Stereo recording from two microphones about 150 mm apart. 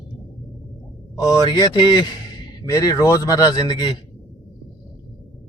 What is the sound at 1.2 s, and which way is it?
A man's voice, 25° left (ahead or behind).